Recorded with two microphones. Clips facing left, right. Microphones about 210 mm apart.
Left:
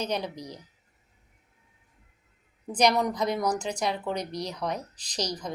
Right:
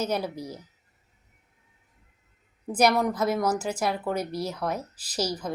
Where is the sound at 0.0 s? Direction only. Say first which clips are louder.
Right 3 dB; 5° right (ahead or behind).